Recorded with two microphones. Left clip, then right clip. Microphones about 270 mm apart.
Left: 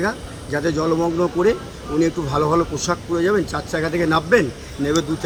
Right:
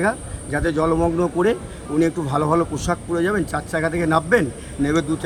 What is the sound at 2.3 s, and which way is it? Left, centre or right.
Speech, centre.